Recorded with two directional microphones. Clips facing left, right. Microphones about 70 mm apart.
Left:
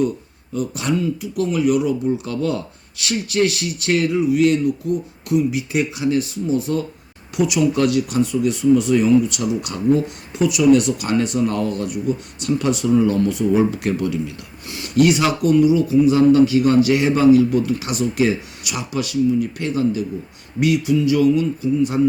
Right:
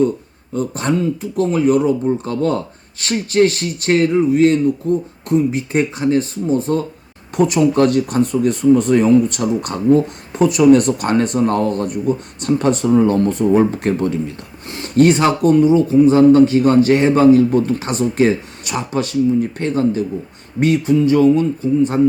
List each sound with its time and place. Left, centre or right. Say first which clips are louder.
0.5 s speech: right 3 dB; right